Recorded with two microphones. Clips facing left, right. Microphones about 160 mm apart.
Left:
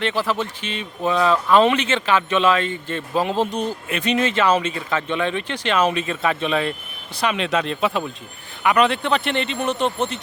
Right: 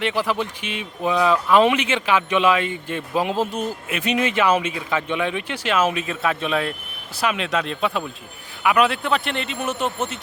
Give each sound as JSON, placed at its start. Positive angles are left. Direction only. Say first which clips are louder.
{"t": 0.0, "sound": "a man's voice", "louder": "even", "side_deg": -10}